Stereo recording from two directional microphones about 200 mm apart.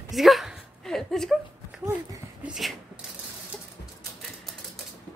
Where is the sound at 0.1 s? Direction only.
Centre (ahead or behind).